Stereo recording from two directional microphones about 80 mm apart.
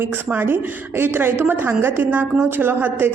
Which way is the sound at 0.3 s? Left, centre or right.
Right.